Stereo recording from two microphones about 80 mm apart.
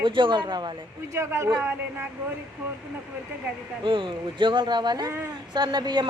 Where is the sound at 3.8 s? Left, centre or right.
Right.